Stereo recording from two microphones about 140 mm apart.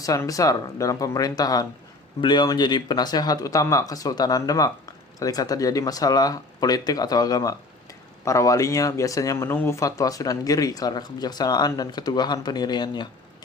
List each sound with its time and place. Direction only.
0.0 s speech: 25° left (ahead or behind)